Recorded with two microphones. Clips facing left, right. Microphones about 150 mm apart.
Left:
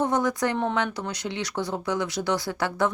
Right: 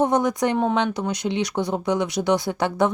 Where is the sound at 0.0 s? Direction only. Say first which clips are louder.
Right 4 dB; 15° right (ahead or behind).